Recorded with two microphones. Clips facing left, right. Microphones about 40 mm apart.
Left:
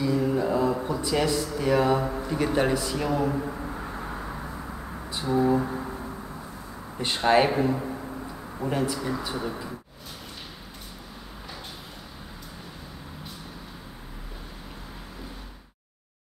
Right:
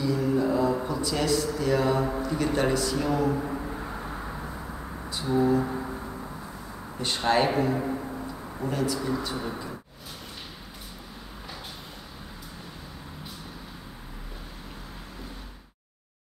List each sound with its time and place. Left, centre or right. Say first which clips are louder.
0.0 s mantra: left 1 dB; centre
0.8 s speech: left 1 dB; centre
2.0 s a man's voice: right 1 dB; centre
2.2 s a man's voice: left 3 dB; centre
3.1 s a sound: left 1 dB; centre
5.6 s a sound: even; centre
7.0 s speech: left 3 dB; centre
7.7 s a sound: right 2 dB; centre
8.6 s speech: left 1 dB; left
9.1 s a man's voice: right 1 dB; centre